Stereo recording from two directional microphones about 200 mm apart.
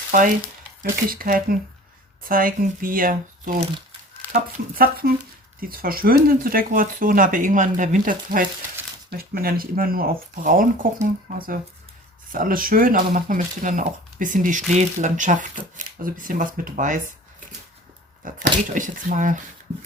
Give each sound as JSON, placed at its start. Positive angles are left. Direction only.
{"t": 0.1, "sound": "speech", "side_deg": -45}
{"t": 4.2, "sound": "a sound", "side_deg": 10}
{"t": 4.8, "sound": "speech", "side_deg": -50}
{"t": 18.2, "sound": "speech", "side_deg": -45}